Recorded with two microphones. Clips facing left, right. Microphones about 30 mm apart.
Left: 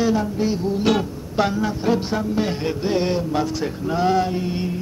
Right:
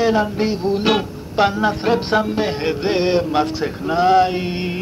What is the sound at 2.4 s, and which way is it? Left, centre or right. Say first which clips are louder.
Music: right 3 dB; right.